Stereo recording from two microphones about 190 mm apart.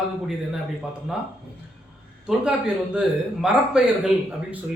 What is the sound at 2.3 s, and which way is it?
A man's voice, 5° right (ahead or behind).